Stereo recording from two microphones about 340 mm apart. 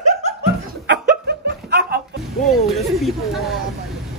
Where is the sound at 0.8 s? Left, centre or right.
Right.